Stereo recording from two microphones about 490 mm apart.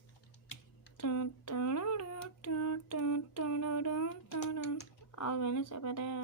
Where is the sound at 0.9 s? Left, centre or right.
Left.